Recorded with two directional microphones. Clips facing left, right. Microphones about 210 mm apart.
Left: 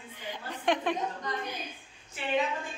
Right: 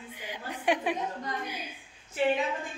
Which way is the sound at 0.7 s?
10° right (ahead or behind).